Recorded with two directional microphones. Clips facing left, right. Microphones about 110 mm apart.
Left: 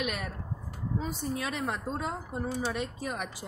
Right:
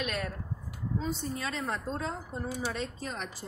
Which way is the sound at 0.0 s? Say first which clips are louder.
Even; 15° left (ahead or behind).